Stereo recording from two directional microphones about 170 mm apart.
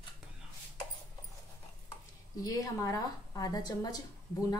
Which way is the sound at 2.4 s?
20° left (ahead or behind).